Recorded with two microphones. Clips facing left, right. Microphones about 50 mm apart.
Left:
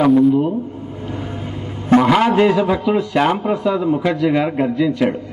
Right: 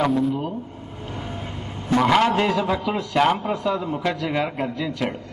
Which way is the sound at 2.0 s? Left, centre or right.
Centre.